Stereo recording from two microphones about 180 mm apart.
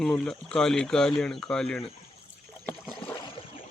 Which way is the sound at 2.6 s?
5° left (ahead or behind).